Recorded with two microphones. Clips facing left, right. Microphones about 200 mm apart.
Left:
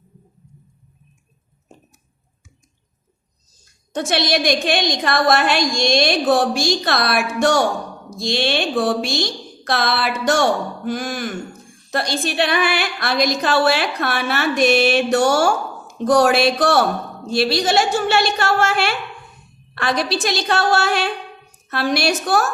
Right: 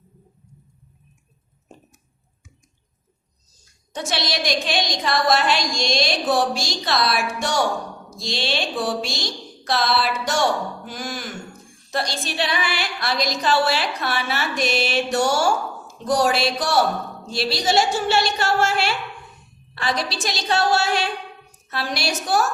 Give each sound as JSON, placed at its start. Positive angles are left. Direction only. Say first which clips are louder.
{"t": 3.9, "sound": "speech", "louder": "left 6 dB", "side_deg": 55}